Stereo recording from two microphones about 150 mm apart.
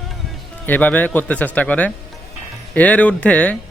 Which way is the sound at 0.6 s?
10° left (ahead or behind).